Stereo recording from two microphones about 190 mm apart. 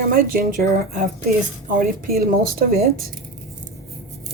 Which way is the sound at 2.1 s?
55° right (ahead or behind).